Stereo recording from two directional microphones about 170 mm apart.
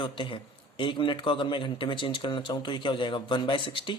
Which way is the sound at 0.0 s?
30° left (ahead or behind).